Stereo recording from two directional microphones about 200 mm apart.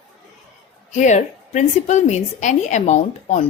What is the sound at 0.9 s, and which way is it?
A woman's voice, 35° left (ahead or behind).